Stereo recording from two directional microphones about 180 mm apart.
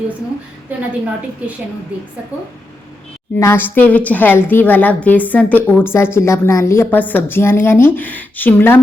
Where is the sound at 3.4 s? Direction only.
10° left (ahead or behind).